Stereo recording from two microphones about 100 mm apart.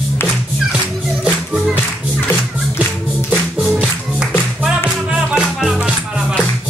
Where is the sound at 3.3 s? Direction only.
10° right (ahead or behind).